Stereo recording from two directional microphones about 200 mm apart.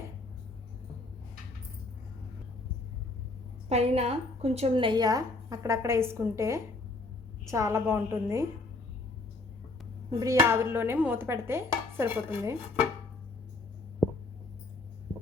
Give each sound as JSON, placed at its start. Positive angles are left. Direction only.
{"t": 3.7, "sound": "a woman's voice", "side_deg": -30}
{"t": 7.4, "sound": "dishes", "side_deg": -15}
{"t": 10.1, "sound": "dishes", "side_deg": -15}